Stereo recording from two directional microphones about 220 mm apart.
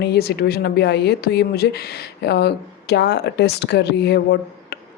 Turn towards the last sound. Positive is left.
turn(degrees=50)  # may be behind; listen again after turning